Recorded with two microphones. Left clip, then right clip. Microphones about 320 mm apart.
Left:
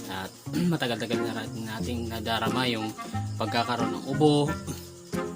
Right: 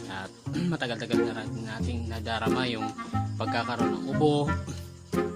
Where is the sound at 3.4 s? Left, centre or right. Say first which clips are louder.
Left 2 dB; right.